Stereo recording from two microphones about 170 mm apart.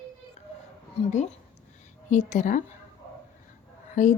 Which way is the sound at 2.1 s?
45° left (ahead or behind).